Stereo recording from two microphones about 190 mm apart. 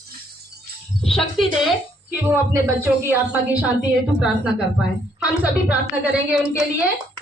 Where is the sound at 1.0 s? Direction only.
Centre (ahead or behind).